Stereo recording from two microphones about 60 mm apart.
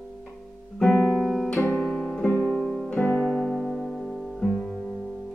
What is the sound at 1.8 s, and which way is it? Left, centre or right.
Music, centre.